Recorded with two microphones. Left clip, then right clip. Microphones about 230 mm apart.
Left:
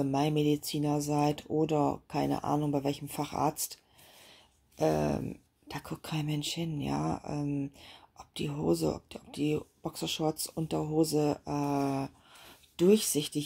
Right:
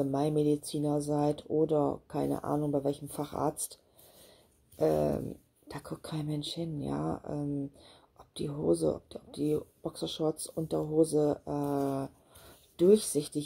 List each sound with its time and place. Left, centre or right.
0.0 s speech: left
4.7 s speech: left